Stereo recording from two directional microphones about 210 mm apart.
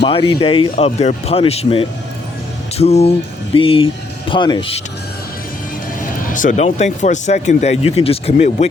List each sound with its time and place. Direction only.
0.0 s speech: 25° left (ahead or behind)
6.0 s speech: 40° left (ahead or behind)